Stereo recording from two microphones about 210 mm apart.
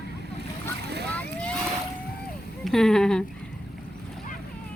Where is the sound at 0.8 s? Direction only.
50° right (ahead or behind).